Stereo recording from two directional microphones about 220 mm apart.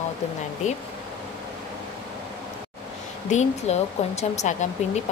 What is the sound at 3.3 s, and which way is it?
Speech, 30° left (ahead or behind).